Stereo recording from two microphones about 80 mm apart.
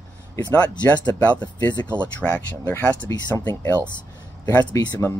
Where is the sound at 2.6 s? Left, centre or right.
Left.